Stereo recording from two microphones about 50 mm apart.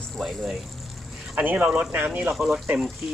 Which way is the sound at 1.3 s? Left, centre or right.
Right.